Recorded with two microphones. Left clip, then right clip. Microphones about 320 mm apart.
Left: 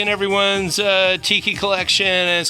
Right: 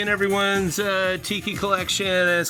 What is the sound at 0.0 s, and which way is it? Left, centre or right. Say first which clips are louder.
Speech: left 4 dB; centre.